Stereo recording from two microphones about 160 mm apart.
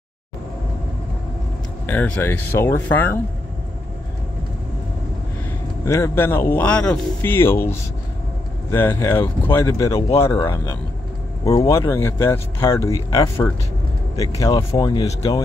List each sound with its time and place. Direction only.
1.9 s speech: 10° left (ahead or behind)
5.9 s speech: 20° left (ahead or behind)
8.7 s speech: 15° left (ahead or behind)